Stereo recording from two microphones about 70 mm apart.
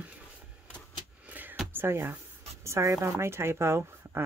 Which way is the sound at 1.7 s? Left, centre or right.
Right.